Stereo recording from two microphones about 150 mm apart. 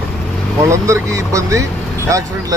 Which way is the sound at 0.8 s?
20° right (ahead or behind).